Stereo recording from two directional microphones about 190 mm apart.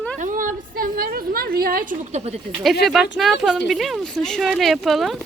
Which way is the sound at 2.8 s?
Centre (ahead or behind).